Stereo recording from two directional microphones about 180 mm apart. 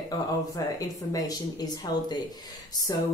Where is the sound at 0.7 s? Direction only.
20° left (ahead or behind).